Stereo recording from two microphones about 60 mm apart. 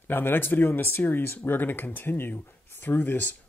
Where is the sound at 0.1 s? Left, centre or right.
Left.